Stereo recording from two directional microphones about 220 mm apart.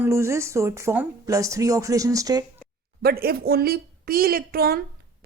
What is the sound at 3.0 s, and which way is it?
A woman's voice, 45° right (ahead or behind).